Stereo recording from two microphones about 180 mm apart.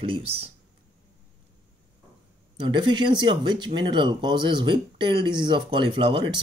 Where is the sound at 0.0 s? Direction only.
30° right (ahead or behind).